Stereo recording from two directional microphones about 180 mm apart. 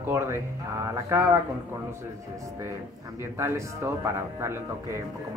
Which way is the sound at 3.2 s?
15° right (ahead or behind).